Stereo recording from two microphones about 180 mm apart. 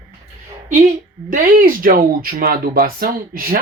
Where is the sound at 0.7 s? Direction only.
45° right (ahead or behind).